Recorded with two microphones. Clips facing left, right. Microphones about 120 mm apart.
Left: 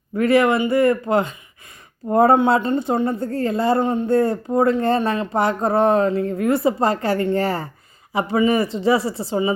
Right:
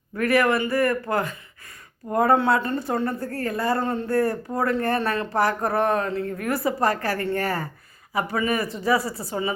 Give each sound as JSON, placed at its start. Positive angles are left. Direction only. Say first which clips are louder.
{"t": 0.2, "sound": "a woman's voice", "louder": "left 4 dB", "side_deg": 25}